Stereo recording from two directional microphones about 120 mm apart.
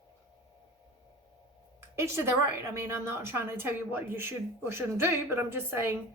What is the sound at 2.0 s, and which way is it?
A woman's voice, 20° right (ahead or behind).